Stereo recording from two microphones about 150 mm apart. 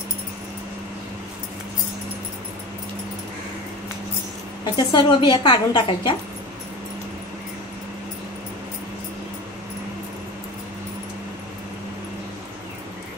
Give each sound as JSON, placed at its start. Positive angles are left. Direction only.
{"t": 4.7, "sound": "a woman's voice", "side_deg": 30}